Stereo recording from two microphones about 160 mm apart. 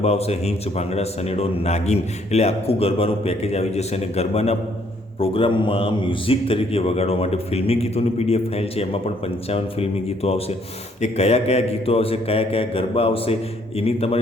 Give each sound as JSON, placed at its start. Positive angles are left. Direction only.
{"t": 0.0, "sound": "a man's voice", "side_deg": 40}